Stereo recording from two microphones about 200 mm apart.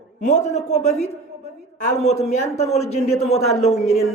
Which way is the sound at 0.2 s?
35° left (ahead or behind).